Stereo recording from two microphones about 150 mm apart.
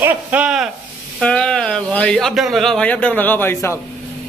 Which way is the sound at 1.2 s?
5° left (ahead or behind).